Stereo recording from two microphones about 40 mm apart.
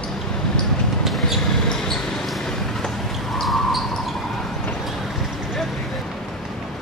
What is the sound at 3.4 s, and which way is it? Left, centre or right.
Basketball bounce, centre.